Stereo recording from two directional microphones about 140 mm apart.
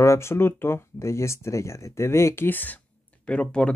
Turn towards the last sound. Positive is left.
turn(degrees=5)  # may be behind; listen again after turning